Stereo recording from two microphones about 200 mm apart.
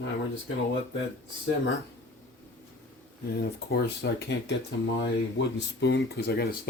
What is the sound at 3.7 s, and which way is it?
Speech, 55° left (ahead or behind).